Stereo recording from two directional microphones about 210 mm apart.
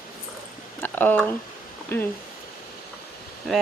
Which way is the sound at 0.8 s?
10° left (ahead or behind).